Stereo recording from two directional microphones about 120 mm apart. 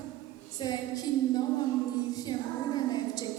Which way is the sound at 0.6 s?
35° left (ahead or behind).